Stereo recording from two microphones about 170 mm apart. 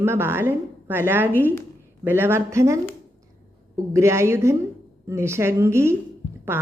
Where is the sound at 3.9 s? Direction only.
15° right (ahead or behind).